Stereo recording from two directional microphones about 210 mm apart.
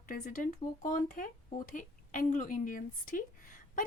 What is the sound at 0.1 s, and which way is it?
Speech, 40° left (ahead or behind).